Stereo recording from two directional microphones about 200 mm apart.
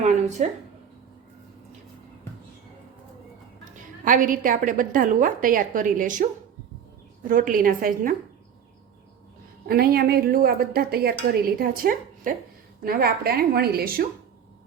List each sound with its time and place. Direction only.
0.0 s a sound: 35° right (ahead or behind)
4.0 s a woman's voice: 45° right (ahead or behind)
7.3 s a woman's voice: 40° right (ahead or behind)
9.6 s a woman's voice: 50° right (ahead or behind)